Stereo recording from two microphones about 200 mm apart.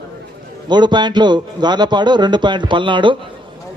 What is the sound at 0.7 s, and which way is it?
A man's voice, 20° right (ahead or behind).